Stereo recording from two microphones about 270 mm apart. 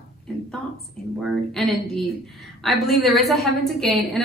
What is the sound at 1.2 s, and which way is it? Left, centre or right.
A woman's voice, centre.